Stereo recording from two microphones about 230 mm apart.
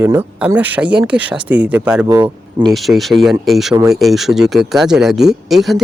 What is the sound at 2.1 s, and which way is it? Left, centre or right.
Speech, centre.